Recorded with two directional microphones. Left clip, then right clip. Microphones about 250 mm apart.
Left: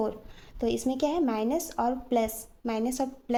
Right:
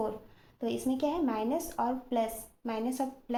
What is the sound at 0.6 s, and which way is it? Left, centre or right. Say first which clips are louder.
A woman's voice: left 4 dB; left.